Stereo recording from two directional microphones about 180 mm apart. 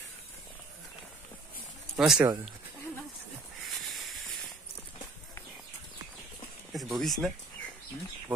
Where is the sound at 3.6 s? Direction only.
Centre (ahead or behind).